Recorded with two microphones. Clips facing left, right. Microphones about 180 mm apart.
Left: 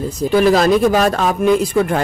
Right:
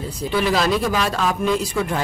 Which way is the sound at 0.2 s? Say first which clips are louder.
Left 7 dB; 45° left (ahead or behind).